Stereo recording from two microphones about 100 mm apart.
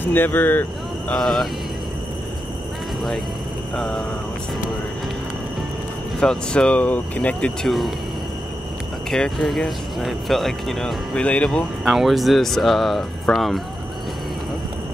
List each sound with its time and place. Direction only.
0.0 s speech: 20° left (ahead or behind)
1.1 s speech: 5° left (ahead or behind)
3.7 s speech: 5° left (ahead or behind)
6.1 s speech: 10° left (ahead or behind)
7.6 s speech: centre (ahead or behind)
9.1 s speech: 5° left (ahead or behind)
11.8 s speech: centre (ahead or behind)